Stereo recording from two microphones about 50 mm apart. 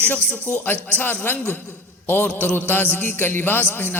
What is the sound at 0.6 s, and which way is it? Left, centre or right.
A man's voice, left.